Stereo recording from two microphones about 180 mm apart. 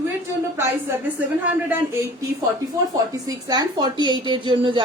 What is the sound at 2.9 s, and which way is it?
Speech, 20° right (ahead or behind).